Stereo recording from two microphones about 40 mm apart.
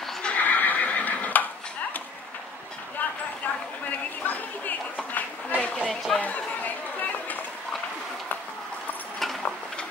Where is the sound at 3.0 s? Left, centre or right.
Left.